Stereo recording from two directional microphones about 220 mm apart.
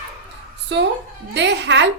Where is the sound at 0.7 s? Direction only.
50° right (ahead or behind).